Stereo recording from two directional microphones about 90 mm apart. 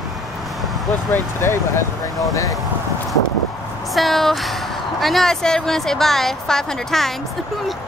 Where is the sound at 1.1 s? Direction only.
30° left (ahead or behind).